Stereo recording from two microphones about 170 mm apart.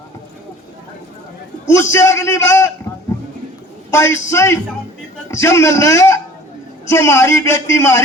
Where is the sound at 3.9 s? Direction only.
15° left (ahead or behind).